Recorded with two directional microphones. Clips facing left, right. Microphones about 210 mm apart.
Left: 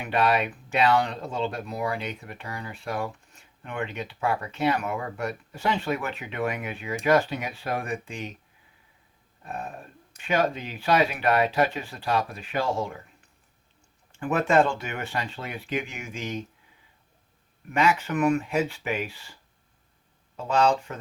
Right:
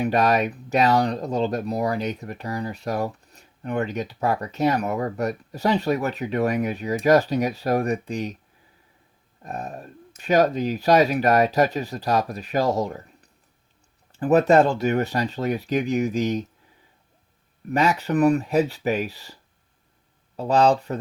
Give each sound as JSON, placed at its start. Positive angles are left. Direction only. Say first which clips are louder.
{"t": 0.0, "sound": "speech", "louder": "right 4 dB", "side_deg": -40}
{"t": 9.4, "sound": "speech", "louder": "right 3 dB", "side_deg": -40}
{"t": 17.7, "sound": "speech", "louder": "right 3 dB", "side_deg": -35}